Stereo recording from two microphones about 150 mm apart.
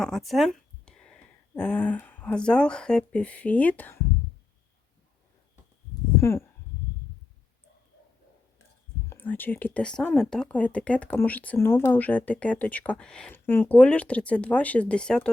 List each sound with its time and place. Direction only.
0.0 s speech: centre (ahead or behind)
6.1 s speech: 20° left (ahead or behind)
9.0 s speech: 10° left (ahead or behind)